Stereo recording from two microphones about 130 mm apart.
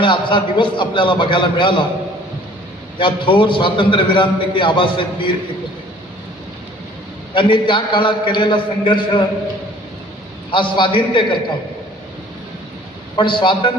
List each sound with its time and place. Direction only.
0.0 s a man's voice: 40° left (ahead or behind)
3.0 s a man's voice: 40° left (ahead or behind)
7.3 s a man's voice: 40° left (ahead or behind)
10.5 s a man's voice: 40° left (ahead or behind)
13.1 s a man's voice: 40° left (ahead or behind)